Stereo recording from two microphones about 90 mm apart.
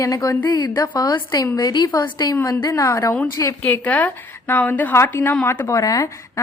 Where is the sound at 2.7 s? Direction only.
35° left (ahead or behind).